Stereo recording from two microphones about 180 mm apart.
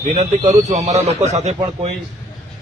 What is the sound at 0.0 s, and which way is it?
A man's voice, 40° right (ahead or behind).